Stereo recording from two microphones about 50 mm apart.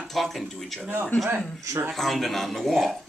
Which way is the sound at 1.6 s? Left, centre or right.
Right.